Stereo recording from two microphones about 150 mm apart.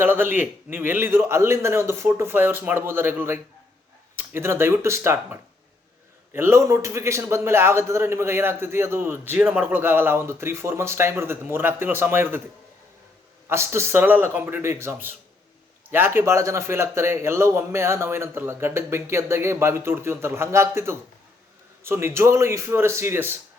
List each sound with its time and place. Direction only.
0.0 s a man's voice: 15° right (ahead or behind)
13.5 s a man's voice: 15° right (ahead or behind)